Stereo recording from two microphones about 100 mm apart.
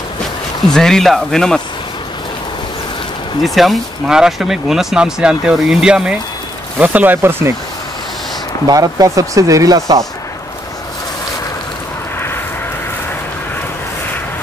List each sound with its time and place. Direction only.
0.7 s speech: 5° left (ahead or behind)
3.4 s speech: centre (ahead or behind); by 7.5 s 25° right (ahead or behind)
8.6 s speech: 40° right (ahead or behind)